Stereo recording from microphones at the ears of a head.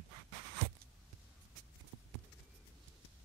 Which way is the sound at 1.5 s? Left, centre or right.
Right.